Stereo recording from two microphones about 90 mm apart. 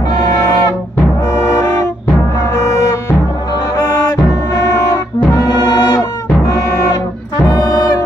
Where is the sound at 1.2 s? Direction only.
35° left (ahead or behind).